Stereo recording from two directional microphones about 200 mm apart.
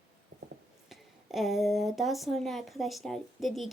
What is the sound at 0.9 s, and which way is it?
A woman's voice, centre (ahead or behind).